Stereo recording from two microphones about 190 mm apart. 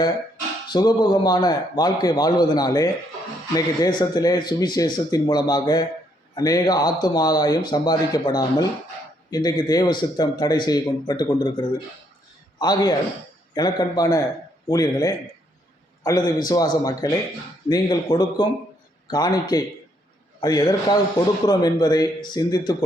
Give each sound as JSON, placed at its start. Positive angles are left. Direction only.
{"t": 0.7, "sound": "a man's voice", "side_deg": 20}